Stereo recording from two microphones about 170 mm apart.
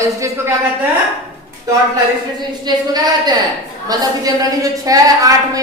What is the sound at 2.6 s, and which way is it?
A woman's voice, 25° right (ahead or behind).